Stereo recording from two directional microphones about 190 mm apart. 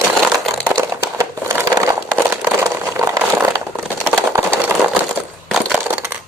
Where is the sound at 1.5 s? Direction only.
15° right (ahead or behind).